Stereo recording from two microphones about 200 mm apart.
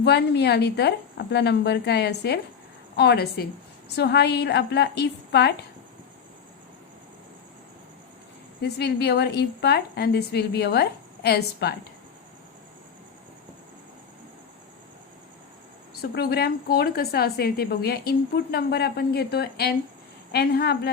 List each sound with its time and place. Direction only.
0.0 s a woman's voice: 55° left (ahead or behind)
8.6 s a woman's voice: 55° left (ahead or behind)
16.0 s a woman's voice: 50° left (ahead or behind)